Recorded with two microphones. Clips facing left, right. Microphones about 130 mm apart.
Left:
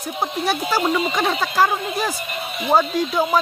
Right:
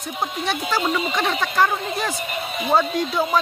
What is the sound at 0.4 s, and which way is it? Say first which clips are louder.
Speech: left 3 dB; 5° left (ahead or behind).